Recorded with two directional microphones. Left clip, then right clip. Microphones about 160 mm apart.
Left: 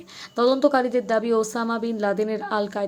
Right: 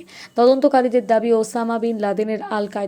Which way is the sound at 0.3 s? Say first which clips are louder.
Right 5 dB; 15° right (ahead or behind).